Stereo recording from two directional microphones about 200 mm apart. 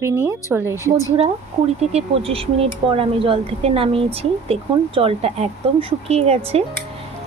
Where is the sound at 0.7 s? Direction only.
15° left (ahead or behind).